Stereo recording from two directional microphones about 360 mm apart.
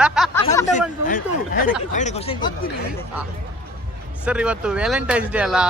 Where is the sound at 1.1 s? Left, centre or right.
Left.